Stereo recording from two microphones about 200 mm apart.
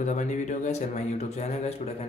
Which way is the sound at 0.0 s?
40° left (ahead or behind).